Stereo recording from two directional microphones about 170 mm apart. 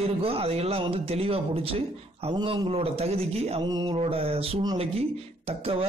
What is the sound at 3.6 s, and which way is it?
Mantra, 20° right (ahead or behind).